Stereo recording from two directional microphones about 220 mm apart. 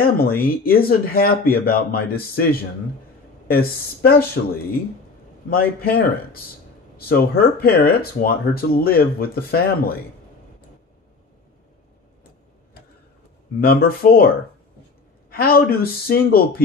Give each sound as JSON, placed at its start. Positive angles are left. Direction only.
{"t": 0.0, "sound": "speech", "side_deg": 45}
{"t": 5.5, "sound": "speech", "side_deg": 40}
{"t": 13.6, "sound": "speech", "side_deg": 40}